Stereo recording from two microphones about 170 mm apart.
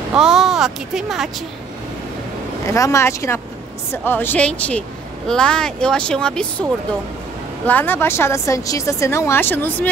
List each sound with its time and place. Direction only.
0.1 s speech: 5° right (ahead or behind)
2.6 s a woman's voice: 20° left (ahead or behind)
7.6 s a woman's voice: 10° left (ahead or behind)